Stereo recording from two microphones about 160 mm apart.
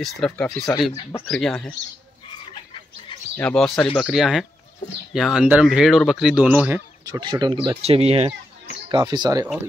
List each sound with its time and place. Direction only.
0.0 s speech: centre (ahead or behind)
3.3 s speech: 5° left (ahead or behind)
7.1 s speech: 25° right (ahead or behind)
8.8 s speech: 25° right (ahead or behind)